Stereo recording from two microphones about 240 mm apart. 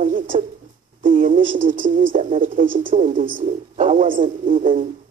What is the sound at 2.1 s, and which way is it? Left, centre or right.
A man's voice, right.